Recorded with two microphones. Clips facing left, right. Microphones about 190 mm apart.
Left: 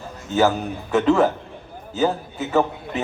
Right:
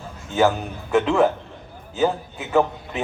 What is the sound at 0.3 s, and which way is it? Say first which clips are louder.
Speech: left 1 dB; centre (ahead or behind).